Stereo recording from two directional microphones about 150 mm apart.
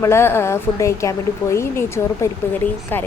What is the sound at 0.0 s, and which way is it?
Speech, 15° left (ahead or behind).